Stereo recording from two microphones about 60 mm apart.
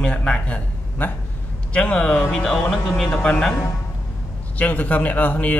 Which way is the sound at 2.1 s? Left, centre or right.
Centre.